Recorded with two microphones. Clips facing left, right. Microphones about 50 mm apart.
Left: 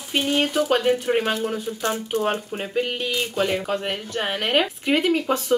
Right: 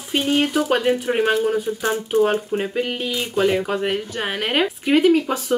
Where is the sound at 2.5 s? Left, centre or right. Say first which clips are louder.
Right 3 dB; centre.